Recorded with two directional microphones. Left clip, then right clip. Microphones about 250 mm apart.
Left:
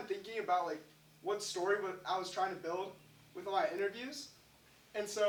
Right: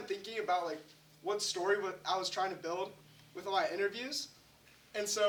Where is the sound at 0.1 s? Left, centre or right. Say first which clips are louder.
Right 1 dB; centre.